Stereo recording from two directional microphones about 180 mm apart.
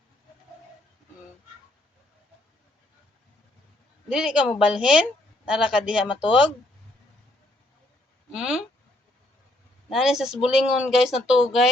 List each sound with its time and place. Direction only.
4.1 s speech: 5° right (ahead or behind)
8.3 s speech: 5° right (ahead or behind)
9.9 s speech: centre (ahead or behind)